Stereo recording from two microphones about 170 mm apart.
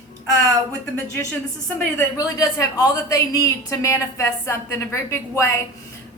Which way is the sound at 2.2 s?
20° left (ahead or behind).